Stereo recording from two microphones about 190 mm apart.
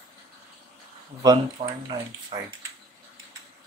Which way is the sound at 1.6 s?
30° right (ahead or behind).